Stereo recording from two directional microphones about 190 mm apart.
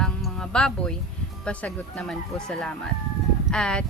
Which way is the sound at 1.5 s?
5° left (ahead or behind).